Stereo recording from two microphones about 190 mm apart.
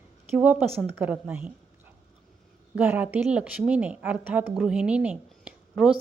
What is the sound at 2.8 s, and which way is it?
A woman's voice, 10° right (ahead or behind).